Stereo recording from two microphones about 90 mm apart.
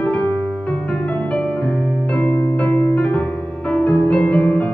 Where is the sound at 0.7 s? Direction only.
15° left (ahead or behind).